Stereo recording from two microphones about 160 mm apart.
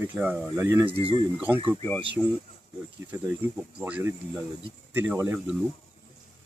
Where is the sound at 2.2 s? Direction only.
Centre (ahead or behind).